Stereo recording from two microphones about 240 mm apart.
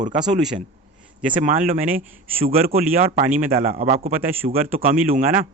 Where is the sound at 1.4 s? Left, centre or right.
Right.